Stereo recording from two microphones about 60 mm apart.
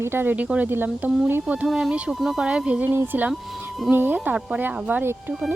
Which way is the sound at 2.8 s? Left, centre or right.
Right.